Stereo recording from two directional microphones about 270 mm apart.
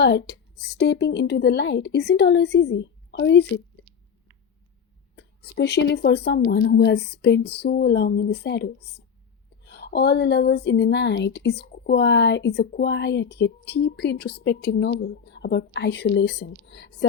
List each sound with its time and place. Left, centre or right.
0.0 s speech: left
5.1 s speech: left